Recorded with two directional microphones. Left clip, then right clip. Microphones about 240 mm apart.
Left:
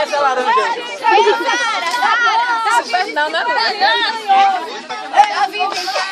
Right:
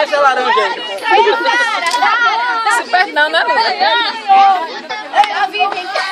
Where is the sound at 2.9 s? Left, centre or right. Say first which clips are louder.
Right 5 dB; right.